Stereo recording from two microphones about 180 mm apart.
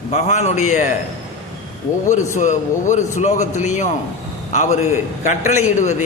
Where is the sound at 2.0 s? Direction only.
45° left (ahead or behind).